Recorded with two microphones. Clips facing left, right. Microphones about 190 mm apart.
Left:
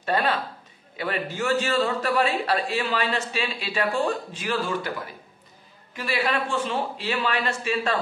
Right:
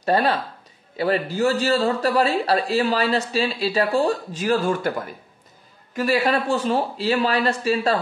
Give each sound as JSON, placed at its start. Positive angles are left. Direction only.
{"t": 0.0, "sound": "a man's voice", "side_deg": -40}